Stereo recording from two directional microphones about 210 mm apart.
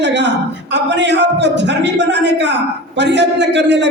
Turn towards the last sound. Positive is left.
turn(degrees=-55)  # may be behind; listen again after turning